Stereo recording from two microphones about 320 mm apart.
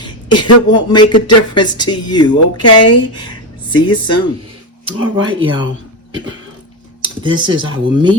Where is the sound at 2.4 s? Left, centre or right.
Left.